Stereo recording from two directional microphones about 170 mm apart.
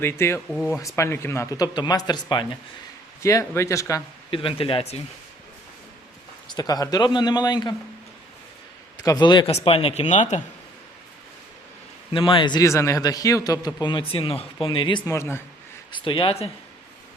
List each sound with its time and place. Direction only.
0.0 s speech: 15° left (ahead or behind)
0.5 s speech: 5° left (ahead or behind)
0.9 s a man's voice: 15° left (ahead or behind)
4.3 s a man's voice: 30° left (ahead or behind)
6.5 s a man's voice: 25° left (ahead or behind)
9.0 s a man's voice: 25° left (ahead or behind); by 10.4 s 45° left (ahead or behind)
12.1 s a man's voice: 30° left (ahead or behind)
15.1 s speech: 15° left (ahead or behind)
15.9 s a man's voice: 30° left (ahead or behind)